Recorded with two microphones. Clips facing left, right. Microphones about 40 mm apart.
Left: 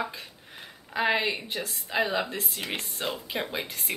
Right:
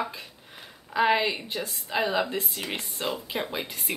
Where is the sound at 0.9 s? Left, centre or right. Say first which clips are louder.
Right 3 dB; centre.